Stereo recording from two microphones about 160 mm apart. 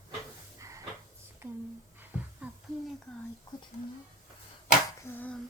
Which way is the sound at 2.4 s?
5° right (ahead or behind).